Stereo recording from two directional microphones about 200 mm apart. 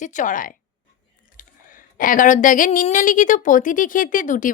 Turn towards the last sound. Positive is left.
turn(degrees=40)  # may be behind; listen again after turning